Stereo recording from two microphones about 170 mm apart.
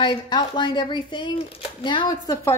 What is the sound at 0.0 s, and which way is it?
Speech, 30° left (ahead or behind).